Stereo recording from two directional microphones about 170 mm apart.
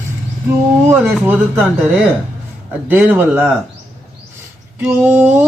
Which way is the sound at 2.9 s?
10° right (ahead or behind).